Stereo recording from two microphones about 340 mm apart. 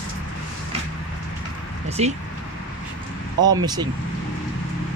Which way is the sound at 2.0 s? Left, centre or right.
Centre.